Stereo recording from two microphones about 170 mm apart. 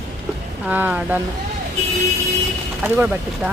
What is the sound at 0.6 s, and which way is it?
Speech, 10° right (ahead or behind).